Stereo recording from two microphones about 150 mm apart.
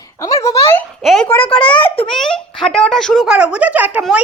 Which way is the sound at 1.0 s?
5° left (ahead or behind).